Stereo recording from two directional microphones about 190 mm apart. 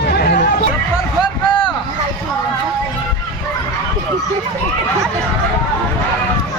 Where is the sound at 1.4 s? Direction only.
25° left (ahead or behind).